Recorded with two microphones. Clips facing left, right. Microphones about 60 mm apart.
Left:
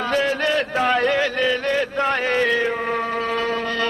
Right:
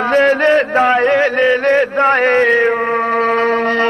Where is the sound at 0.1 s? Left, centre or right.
Right.